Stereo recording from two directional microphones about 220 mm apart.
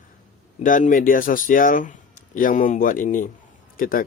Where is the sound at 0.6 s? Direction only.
35° left (ahead or behind).